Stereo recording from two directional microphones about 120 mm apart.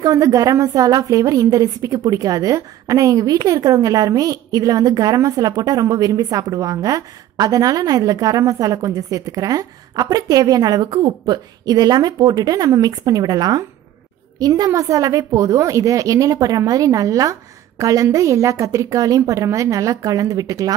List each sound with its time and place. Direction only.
0.0 s a woman's voice: 30° right (ahead or behind)